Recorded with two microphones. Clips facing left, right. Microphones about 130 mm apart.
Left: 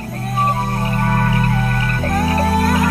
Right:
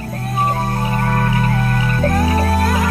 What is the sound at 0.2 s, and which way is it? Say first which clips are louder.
Music: even; centre (ahead or behind).